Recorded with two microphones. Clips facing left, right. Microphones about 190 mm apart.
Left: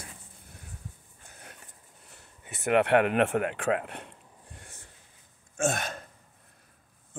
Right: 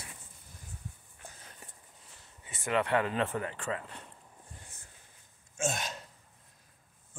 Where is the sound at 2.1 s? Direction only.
65° left (ahead or behind).